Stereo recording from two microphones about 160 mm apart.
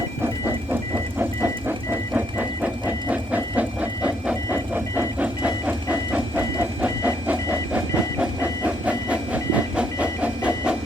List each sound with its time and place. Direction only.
0.2 s music: 15° right (ahead or behind)
1.2 s vehicle: 15° right (ahead or behind)